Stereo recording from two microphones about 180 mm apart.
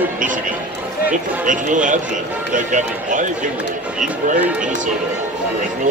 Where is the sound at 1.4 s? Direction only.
45° right (ahead or behind).